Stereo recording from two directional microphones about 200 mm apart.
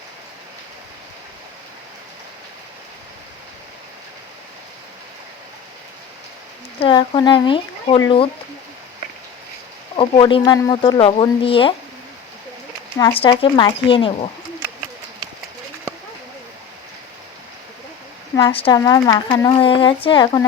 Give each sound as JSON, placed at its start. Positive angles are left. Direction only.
{"t": 6.8, "sound": "speech", "side_deg": 25}
{"t": 9.9, "sound": "speech", "side_deg": 25}
{"t": 13.0, "sound": "speech", "side_deg": 25}
{"t": 18.3, "sound": "speech", "side_deg": 25}